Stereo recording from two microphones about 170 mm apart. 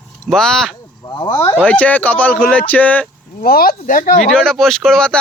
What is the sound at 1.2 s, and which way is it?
Speech, 20° left (ahead or behind).